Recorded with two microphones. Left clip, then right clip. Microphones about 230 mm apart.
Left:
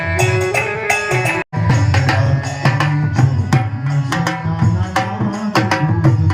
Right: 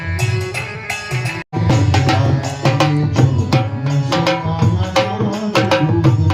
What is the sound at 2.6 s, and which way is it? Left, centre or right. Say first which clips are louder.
Music: right 2 dB; right.